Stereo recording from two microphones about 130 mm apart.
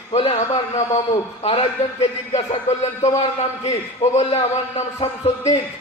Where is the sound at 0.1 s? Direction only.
50° left (ahead or behind).